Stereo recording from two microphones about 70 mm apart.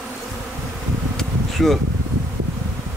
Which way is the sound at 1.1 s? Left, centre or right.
Centre.